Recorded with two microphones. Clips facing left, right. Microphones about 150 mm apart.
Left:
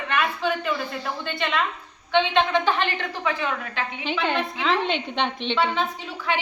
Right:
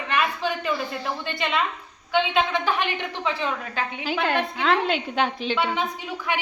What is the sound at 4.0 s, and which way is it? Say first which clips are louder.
A woman's voice: right 1 dB; 5° right (ahead or behind).